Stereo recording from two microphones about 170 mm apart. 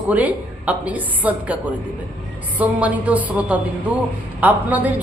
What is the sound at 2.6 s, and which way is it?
A woman's voice, 10° right (ahead or behind).